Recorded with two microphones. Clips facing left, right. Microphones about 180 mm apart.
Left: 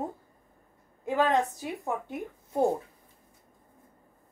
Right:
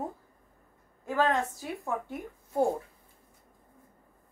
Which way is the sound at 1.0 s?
20° left (ahead or behind).